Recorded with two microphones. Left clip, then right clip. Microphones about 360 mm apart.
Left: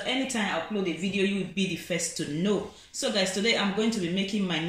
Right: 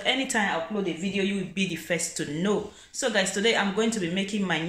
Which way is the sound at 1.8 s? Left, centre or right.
Right.